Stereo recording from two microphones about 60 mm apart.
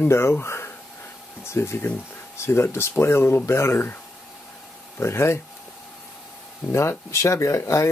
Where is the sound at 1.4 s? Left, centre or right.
Left.